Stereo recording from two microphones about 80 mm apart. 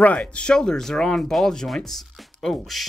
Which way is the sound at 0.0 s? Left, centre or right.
Centre.